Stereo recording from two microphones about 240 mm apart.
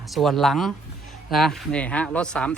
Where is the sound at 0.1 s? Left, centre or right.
Centre.